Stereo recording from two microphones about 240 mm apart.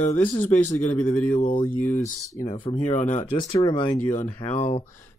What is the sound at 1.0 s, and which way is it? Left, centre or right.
Speech, centre.